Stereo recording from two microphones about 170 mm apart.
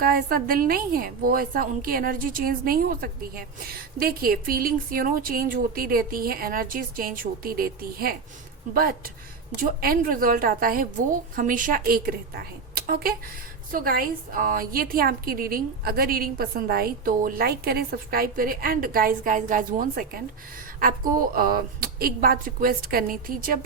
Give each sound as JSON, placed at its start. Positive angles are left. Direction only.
{"t": 0.0, "sound": "a woman's voice", "side_deg": -60}